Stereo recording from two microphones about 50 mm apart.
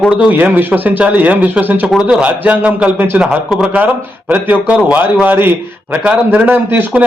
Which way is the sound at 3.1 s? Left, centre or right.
Right.